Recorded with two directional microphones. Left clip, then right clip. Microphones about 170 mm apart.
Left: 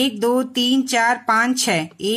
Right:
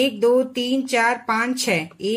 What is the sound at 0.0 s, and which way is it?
Speech, 45° left (ahead or behind).